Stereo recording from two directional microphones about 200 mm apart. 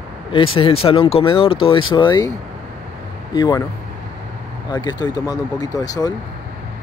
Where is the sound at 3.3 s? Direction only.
20° left (ahead or behind).